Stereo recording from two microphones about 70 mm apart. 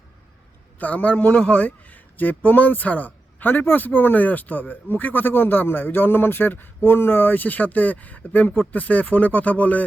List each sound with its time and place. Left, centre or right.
0.8 s a man's voice: left